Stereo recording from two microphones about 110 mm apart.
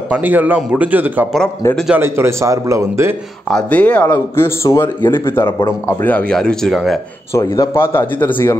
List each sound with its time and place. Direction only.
0.1 s a man's voice: 15° right (ahead or behind)
3.4 s a man's voice: 10° left (ahead or behind)
7.3 s a man's voice: 25° left (ahead or behind)